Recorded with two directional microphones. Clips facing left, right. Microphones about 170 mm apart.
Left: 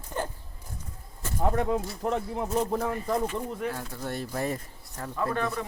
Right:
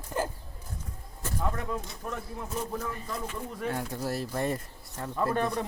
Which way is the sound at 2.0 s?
90° left.